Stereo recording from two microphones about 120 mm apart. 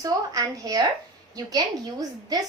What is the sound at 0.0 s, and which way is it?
A woman's voice, 30° right (ahead or behind).